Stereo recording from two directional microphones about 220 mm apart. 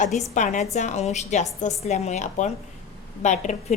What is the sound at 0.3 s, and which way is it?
A woman's voice, 35° left (ahead or behind).